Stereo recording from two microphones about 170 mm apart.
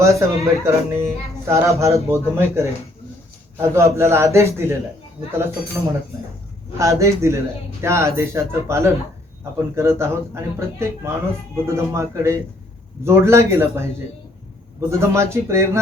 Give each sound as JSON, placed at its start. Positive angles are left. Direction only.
{"t": 0.0, "sound": "a man's voice", "side_deg": -20}
{"t": 6.7, "sound": "a man's voice", "side_deg": -15}